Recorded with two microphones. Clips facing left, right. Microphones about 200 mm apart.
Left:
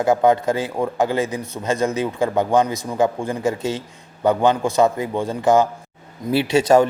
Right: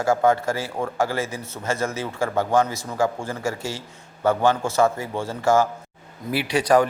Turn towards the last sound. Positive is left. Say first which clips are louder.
# left 4 dB
turn(degrees=25)  # may be behind; listen again after turning